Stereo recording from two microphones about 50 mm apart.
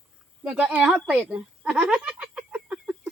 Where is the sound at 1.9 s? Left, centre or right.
Centre.